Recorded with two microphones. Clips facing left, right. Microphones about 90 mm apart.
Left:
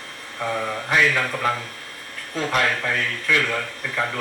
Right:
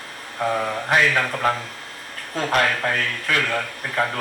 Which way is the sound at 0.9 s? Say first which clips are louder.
Right 1 dB; 45° right (ahead or behind).